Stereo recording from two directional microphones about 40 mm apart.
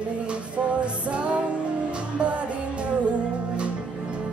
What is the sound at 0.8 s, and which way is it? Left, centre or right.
Music, right.